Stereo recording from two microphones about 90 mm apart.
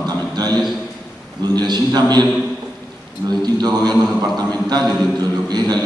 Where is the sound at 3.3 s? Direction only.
50° right (ahead or behind).